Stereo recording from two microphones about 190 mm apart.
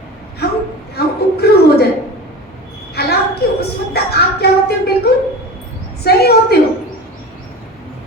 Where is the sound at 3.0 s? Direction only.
55° left (ahead or behind).